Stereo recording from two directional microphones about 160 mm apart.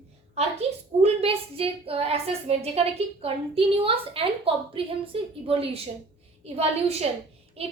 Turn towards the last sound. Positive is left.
turn(degrees=-40)  # may be behind; listen again after turning